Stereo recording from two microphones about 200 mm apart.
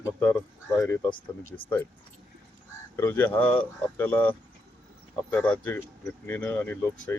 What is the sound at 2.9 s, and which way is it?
Speech, 10° left (ahead or behind).